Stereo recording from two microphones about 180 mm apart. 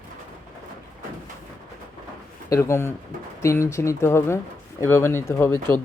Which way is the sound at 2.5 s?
15° left (ahead or behind).